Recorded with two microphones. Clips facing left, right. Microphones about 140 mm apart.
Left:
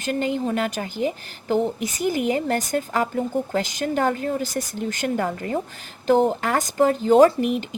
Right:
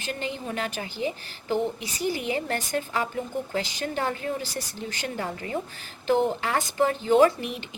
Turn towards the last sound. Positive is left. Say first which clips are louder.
# left 5 dB
turn(degrees=40)  # may be behind; listen again after turning